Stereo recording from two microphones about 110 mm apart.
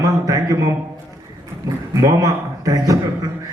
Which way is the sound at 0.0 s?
30° right (ahead or behind).